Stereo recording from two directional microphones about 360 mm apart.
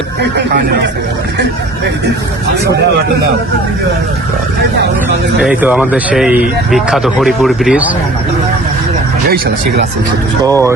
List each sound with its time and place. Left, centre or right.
0.2 s speech: right
5.4 s speech: centre